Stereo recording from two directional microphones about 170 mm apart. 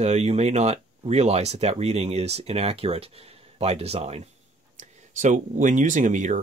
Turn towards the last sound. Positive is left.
turn(degrees=-45)  # may be behind; listen again after turning